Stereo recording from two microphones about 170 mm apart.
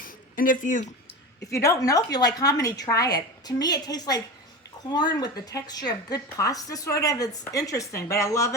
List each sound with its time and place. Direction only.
0.0 s a sound: 55° left (ahead or behind)
1.5 s a woman's voice: 20° left (ahead or behind)
5.2 s a woman's voice: 20° left (ahead or behind)